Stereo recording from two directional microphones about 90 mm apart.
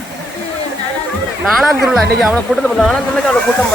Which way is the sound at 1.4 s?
5° right (ahead or behind).